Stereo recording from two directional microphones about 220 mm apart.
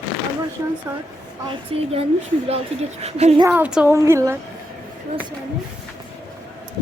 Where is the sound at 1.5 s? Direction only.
25° right (ahead or behind).